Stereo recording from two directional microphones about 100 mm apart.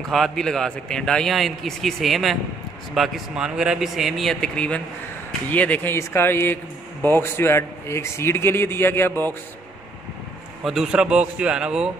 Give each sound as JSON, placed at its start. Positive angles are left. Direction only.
{"t": 0.1, "sound": "a man's voice", "side_deg": 5}
{"t": 10.6, "sound": "a man's voice", "side_deg": -5}